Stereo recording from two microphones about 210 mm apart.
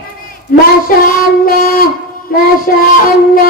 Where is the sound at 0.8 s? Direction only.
40° left (ahead or behind).